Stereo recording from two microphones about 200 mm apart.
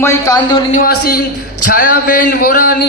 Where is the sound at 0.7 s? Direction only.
50° left (ahead or behind).